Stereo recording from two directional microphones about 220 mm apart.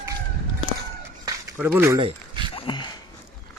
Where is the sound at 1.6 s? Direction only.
10° right (ahead or behind).